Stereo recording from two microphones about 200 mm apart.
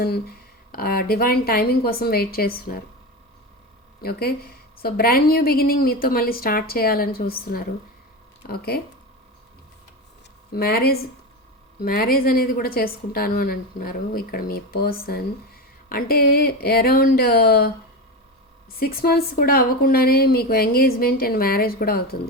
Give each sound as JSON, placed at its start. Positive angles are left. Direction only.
{"t": 0.7, "sound": "a woman's voice", "side_deg": 50}
{"t": 4.0, "sound": "a woman's voice", "side_deg": 50}
{"t": 10.5, "sound": "a woman's voice", "side_deg": 50}
{"t": 18.8, "sound": "a woman's voice", "side_deg": 50}